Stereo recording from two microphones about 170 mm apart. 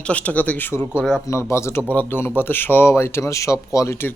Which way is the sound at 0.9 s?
Centre (ahead or behind).